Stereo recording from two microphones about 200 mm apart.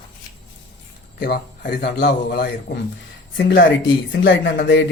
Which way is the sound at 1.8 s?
55° left (ahead or behind).